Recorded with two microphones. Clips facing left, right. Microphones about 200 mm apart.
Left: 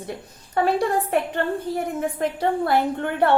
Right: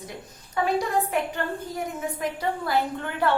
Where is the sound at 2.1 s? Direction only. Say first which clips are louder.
Left 6 dB; 60° left (ahead or behind).